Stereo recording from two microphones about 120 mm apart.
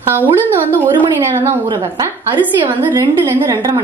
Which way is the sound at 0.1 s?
15° right (ahead or behind).